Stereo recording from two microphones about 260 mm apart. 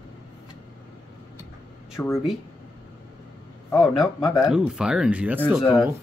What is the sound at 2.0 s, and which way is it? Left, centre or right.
Speech, centre.